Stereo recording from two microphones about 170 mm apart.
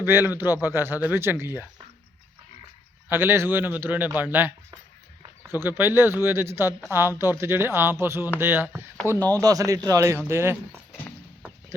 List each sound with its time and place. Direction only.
0.0 s a man's voice: 10° right (ahead or behind)
3.1 s a man's voice: 15° right (ahead or behind)
5.6 s a man's voice: 10° right (ahead or behind)